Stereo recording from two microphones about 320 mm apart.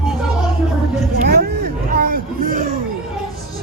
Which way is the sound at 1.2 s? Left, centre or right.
Right.